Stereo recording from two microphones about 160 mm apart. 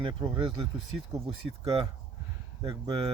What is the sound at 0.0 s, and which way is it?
Speech, 30° right (ahead or behind).